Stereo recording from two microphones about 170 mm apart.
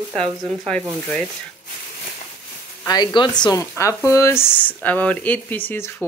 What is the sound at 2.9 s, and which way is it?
A woman's voice, 25° left (ahead or behind).